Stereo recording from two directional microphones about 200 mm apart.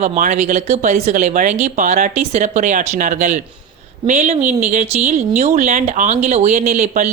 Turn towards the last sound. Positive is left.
turn(degrees=-35)  # may be behind; listen again after turning